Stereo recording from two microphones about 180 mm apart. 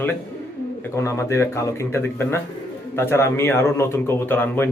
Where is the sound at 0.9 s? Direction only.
15° left (ahead or behind).